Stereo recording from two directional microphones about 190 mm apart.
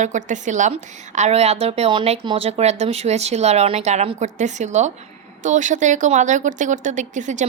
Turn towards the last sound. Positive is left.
turn(degrees=-40)  # may be behind; listen again after turning